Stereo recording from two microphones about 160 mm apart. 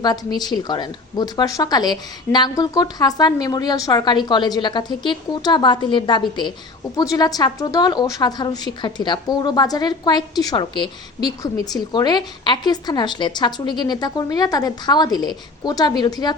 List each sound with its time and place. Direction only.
0.0 s a woman's voice: 25° left (ahead or behind)